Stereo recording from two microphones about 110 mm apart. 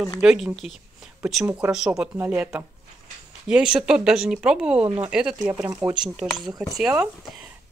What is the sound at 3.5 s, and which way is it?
Speech, 5° right (ahead or behind).